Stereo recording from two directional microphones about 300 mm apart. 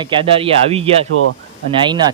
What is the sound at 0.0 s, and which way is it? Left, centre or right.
Speech, centre.